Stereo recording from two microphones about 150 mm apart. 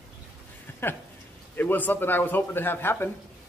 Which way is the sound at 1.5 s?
15° left (ahead or behind).